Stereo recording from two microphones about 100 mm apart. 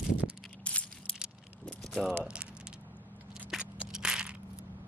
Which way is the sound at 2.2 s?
10° right (ahead or behind).